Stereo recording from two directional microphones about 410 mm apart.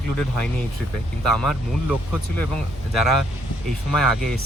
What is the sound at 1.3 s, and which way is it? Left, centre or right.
Speech, centre.